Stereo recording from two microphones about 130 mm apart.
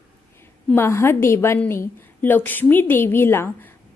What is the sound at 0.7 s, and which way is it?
A woman's voice, 20° left (ahead or behind).